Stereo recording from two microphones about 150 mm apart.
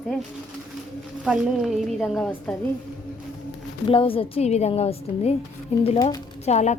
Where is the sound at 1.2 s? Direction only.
5° right (ahead or behind).